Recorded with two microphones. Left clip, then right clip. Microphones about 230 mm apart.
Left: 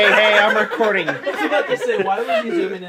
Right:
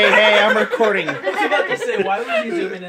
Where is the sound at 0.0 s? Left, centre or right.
Centre.